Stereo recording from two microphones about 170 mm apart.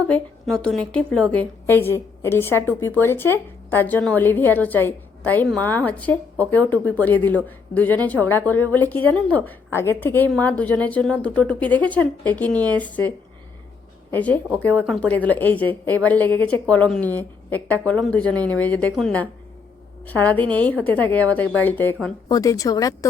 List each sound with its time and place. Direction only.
0.1 s a woman's voice: 5° left (ahead or behind); by 23.0 s 20° left (ahead or behind)